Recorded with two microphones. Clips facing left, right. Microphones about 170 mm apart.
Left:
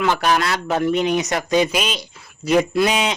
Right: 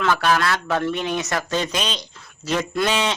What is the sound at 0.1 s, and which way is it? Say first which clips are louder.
Speech: left 1 dB; 20° left (ahead or behind).